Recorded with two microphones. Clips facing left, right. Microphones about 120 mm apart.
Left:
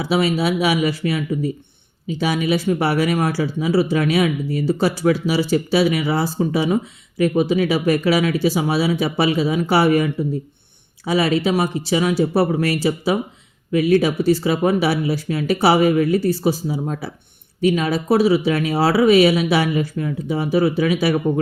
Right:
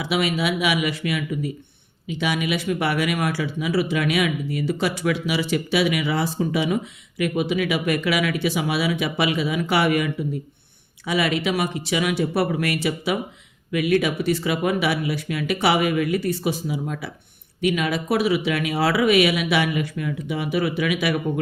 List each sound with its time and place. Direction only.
0.0 s speech: 30° left (ahead or behind)